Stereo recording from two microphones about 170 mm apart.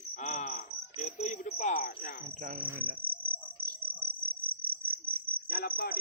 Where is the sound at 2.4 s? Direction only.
55° right (ahead or behind).